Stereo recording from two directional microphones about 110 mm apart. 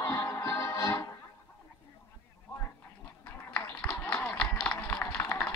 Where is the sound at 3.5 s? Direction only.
10° left (ahead or behind).